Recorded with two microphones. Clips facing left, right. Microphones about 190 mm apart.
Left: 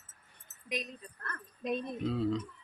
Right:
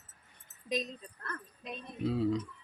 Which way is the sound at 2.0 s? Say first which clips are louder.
Right 4 dB; 10° right (ahead or behind).